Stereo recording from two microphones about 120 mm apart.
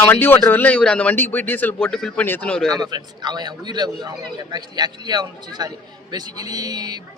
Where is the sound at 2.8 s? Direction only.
35° right (ahead or behind).